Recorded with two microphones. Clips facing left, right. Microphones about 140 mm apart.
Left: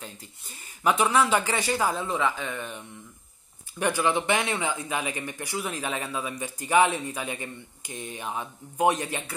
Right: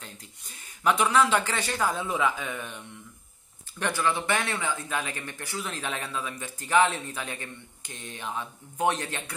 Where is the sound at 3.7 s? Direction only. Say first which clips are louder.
Left 3 dB; 10° left (ahead or behind).